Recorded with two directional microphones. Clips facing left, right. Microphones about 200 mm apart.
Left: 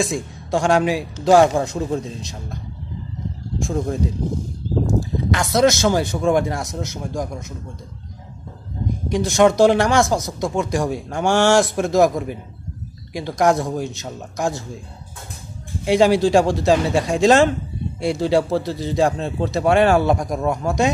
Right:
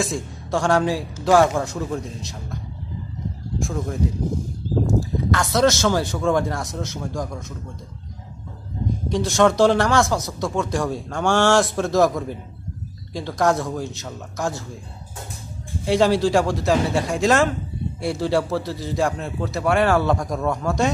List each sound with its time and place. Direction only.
0.0 s a man's voice: 15° left (ahead or behind)
3.6 s a man's voice: 25° left (ahead or behind)
5.3 s speech: 15° left (ahead or behind)
9.1 s speech: 15° left (ahead or behind)
15.8 s a man's voice: 15° left (ahead or behind)